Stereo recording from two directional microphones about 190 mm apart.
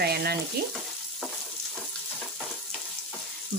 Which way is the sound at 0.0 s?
55° right (ahead or behind).